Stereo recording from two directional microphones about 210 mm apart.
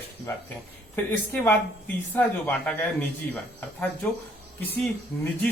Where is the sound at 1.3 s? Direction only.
5° left (ahead or behind).